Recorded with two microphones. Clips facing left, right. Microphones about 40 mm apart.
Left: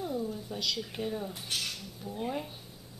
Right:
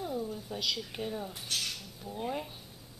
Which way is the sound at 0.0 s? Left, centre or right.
Centre.